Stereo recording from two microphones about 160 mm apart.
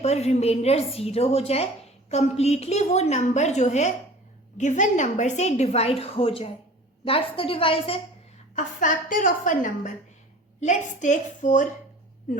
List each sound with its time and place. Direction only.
0.0 s a woman's voice: 45° left (ahead or behind)
8.5 s a woman's voice: 55° left (ahead or behind)